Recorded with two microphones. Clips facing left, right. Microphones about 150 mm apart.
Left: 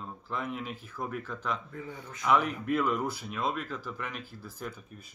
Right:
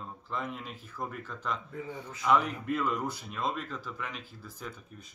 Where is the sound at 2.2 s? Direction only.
5° left (ahead or behind).